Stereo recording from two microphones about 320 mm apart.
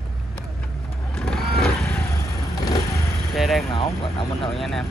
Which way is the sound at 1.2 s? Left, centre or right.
Centre.